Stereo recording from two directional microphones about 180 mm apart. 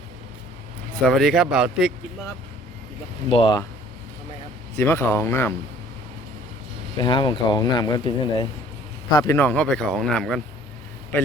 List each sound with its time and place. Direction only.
1.0 s speech: centre (ahead or behind)
3.2 s speech: 30° left (ahead or behind)
4.8 s speech: 15° left (ahead or behind)
6.9 s speech: 25° left (ahead or behind)
9.1 s speech: 15° left (ahead or behind)